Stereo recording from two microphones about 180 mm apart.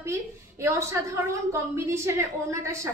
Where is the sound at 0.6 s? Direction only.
15° right (ahead or behind).